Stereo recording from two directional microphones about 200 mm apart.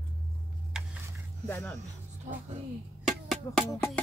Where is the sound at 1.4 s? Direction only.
10° left (ahead or behind).